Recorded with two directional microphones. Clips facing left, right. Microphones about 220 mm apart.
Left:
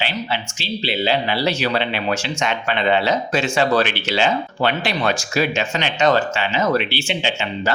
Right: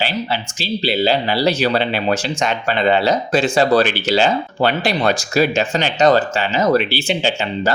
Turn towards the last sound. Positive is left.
turn(degrees=-40)  # may be behind; listen again after turning